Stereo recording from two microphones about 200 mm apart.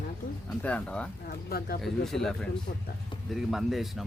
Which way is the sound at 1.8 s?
Centre (ahead or behind).